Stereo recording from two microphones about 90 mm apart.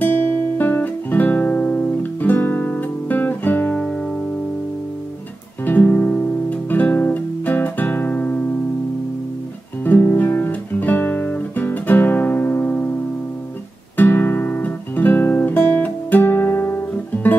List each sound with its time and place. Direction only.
0.6 s music: 20° left (ahead or behind)
5.7 s music: 20° left (ahead or behind)
9.8 s guitar: 20° left (ahead or behind)
13.9 s guitar: 25° left (ahead or behind)
16.9 s music: 20° left (ahead or behind)